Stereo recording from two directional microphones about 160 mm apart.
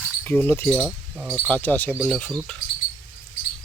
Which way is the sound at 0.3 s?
15° left (ahead or behind).